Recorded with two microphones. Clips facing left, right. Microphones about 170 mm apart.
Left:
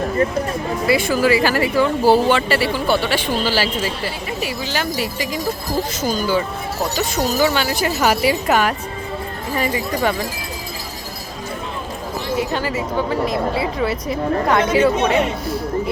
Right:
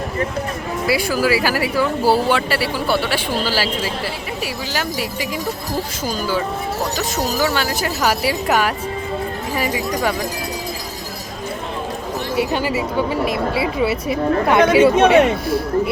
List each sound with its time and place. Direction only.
0.9 s speech: 5° right (ahead or behind)
12.4 s speech: 15° right (ahead or behind)
14.6 s speech: 70° right (ahead or behind)